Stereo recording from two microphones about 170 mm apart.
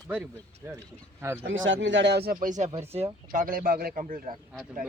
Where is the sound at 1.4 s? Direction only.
90° right; by 3.4 s 35° right (ahead or behind).